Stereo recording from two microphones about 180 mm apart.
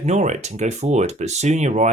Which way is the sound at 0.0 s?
40° right (ahead or behind).